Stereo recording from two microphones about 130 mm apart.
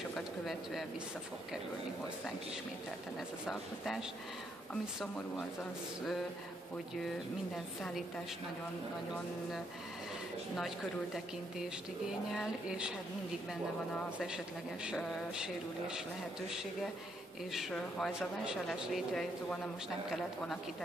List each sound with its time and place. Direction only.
3.4 s speech: centre (ahead or behind)
5.0 s speech: 5° left (ahead or behind)
7.5 s speech: centre (ahead or behind)
12.1 s speech: 5° right (ahead or behind)
14.1 s speech: 5° right (ahead or behind)